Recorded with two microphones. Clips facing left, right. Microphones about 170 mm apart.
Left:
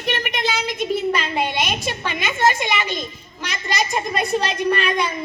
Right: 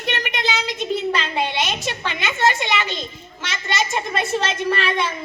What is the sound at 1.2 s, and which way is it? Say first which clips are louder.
A child's voice: left 1 dB; 15° left (ahead or behind).